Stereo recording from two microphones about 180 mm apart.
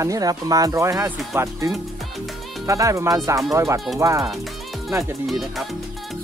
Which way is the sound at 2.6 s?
20° right (ahead or behind).